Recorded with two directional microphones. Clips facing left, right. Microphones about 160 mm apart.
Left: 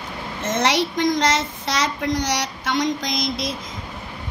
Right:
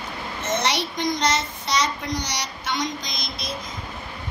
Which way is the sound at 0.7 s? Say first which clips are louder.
Left 5 dB; 90° left.